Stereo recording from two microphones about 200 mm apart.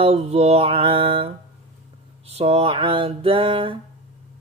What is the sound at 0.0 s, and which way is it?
Music, 30° right (ahead or behind).